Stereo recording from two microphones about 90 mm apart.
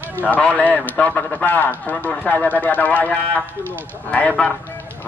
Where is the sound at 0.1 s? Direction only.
20° left (ahead or behind).